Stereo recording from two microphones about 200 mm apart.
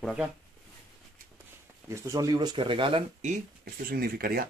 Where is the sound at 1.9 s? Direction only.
15° right (ahead or behind); by 3.3 s 30° right (ahead or behind).